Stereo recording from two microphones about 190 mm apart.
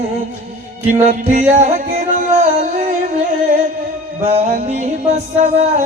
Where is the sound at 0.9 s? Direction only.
40° right (ahead or behind).